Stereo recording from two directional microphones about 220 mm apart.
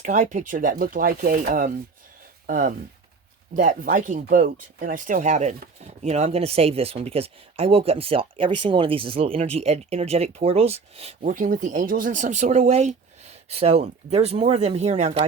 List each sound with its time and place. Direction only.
0.0 s speech: 35° right (ahead or behind)